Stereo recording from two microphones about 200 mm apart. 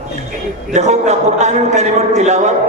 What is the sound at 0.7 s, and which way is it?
A man's voice, 35° right (ahead or behind).